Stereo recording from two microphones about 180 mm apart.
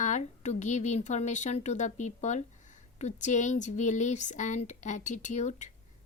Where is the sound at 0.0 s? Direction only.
40° left (ahead or behind).